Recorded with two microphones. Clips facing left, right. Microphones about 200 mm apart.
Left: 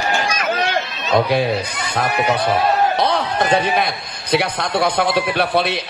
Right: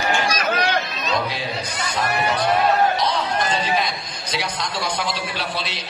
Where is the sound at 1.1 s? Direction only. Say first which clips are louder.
Left 10 dB; 60° left (ahead or behind).